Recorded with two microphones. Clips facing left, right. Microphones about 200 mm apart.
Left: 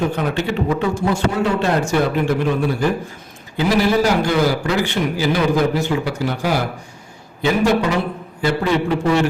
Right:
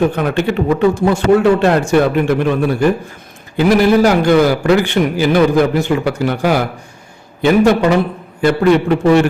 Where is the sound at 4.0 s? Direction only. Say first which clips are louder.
Right 6 dB; 60° right (ahead or behind).